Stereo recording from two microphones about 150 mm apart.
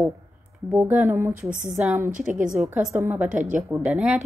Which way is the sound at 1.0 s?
15° right (ahead or behind).